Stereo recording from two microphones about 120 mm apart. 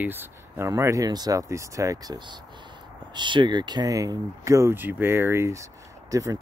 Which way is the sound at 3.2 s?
40° right (ahead or behind).